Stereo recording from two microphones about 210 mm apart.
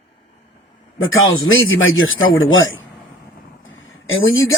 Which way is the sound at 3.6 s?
70° left (ahead or behind).